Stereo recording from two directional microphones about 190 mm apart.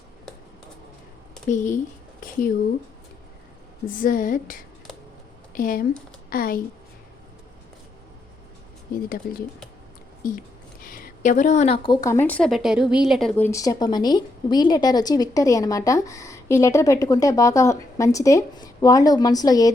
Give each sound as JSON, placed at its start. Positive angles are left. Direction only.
{"t": 1.5, "sound": "speech", "side_deg": 40}
{"t": 2.2, "sound": "a sound", "side_deg": 45}
{"t": 3.8, "sound": "a woman's voice", "side_deg": 45}
{"t": 9.0, "sound": "a woman's voice", "side_deg": 50}
{"t": 10.8, "sound": "a woman's voice", "side_deg": 50}